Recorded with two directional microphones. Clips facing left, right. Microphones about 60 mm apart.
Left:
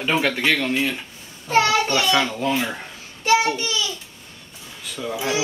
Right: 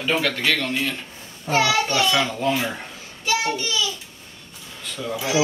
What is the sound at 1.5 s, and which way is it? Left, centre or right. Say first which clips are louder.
Speech: left 2 dB; left.